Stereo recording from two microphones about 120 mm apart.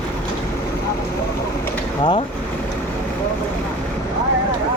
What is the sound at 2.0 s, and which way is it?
Speech, 40° left (ahead or behind).